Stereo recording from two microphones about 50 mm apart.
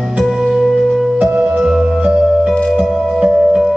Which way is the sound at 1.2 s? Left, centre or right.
Right.